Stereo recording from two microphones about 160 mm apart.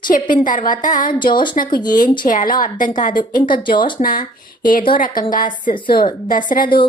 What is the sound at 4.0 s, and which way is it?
Speech, 50° left (ahead or behind).